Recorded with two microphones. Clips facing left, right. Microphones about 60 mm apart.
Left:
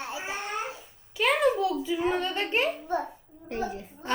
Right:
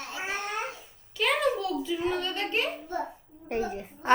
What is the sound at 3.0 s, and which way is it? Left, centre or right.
A child's voice, right.